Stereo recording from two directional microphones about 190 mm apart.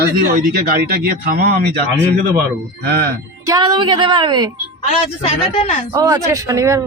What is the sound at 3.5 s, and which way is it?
Speech, 20° right (ahead or behind).